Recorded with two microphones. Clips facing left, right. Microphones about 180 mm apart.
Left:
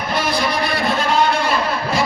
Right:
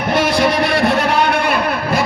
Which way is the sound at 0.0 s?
75° right (ahead or behind).